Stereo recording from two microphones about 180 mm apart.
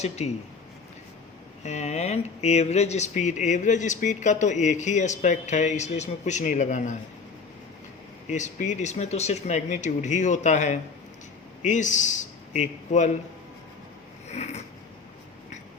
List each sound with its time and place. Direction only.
0.0 s speech: 40° left (ahead or behind)
1.6 s speech: 40° left (ahead or behind)
8.3 s a man's voice: 45° left (ahead or behind)
14.3 s a sound: 35° left (ahead or behind)